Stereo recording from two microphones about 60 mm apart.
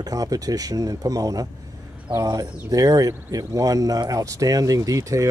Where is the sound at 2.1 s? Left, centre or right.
Right.